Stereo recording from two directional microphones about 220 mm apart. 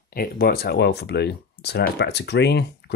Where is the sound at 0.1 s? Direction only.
45° left (ahead or behind).